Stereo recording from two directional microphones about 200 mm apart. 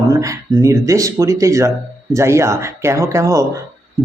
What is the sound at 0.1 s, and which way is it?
Speech, 15° right (ahead or behind).